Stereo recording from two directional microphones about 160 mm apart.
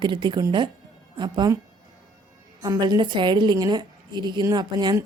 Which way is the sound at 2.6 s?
25° right (ahead or behind).